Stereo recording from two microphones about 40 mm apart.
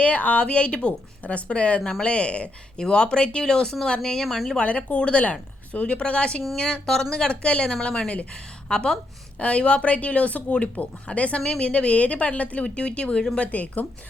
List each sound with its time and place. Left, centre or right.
0.0 s a woman's voice: left
1.8 s speech: centre
2.0 s a woman's voice: left
4.2 s speech: centre
4.6 s a woman's voice: left
8.3 s a woman's voice: left
9.4 s speech: left